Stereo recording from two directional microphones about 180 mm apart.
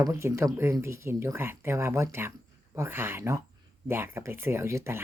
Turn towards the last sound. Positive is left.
turn(degrees=-15)  # may be behind; listen again after turning